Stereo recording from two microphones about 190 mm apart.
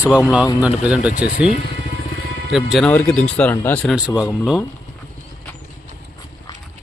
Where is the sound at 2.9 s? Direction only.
10° left (ahead or behind).